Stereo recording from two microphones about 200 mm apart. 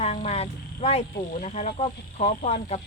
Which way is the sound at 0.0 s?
30° left (ahead or behind).